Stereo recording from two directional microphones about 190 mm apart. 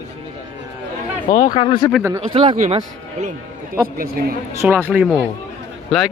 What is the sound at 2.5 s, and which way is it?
Speech, 40° right (ahead or behind).